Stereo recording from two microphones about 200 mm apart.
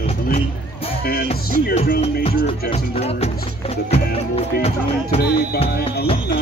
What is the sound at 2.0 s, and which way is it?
Speech, 30° left (ahead or behind).